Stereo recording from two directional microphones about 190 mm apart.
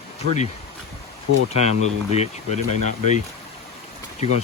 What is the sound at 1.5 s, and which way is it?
Speech, 35° left (ahead or behind).